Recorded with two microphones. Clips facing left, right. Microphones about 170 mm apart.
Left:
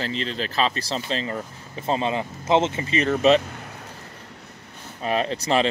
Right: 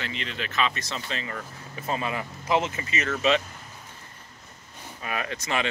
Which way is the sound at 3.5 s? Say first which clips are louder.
Left 7 dB; 70° left (ahead or behind).